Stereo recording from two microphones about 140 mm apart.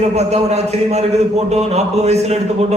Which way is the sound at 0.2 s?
50° right (ahead or behind).